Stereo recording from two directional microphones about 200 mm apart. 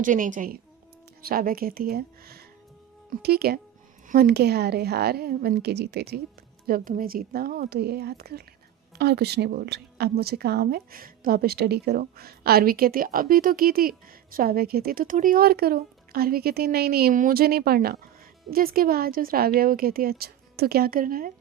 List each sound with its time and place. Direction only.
0.0 s a woman's voice: 40° right (ahead or behind)